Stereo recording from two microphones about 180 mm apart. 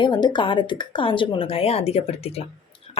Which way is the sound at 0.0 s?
25° left (ahead or behind).